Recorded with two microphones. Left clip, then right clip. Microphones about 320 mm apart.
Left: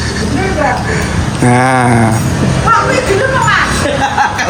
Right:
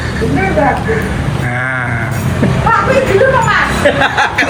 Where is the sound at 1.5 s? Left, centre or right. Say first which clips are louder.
Left 7 dB; centre.